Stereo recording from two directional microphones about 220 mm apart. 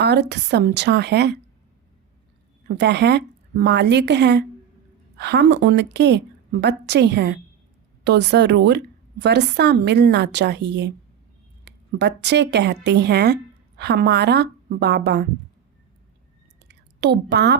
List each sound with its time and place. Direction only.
0.0 s a woman's voice: 50° right (ahead or behind)
2.6 s a woman's voice: 50° right (ahead or behind)
16.6 s a sound: 50° right (ahead or behind)